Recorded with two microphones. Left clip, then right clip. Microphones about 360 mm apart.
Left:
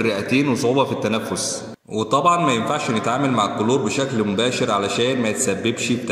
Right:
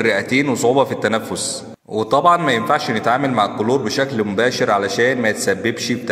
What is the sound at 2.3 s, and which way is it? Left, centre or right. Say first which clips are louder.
A man's voice: right 4 dB; right.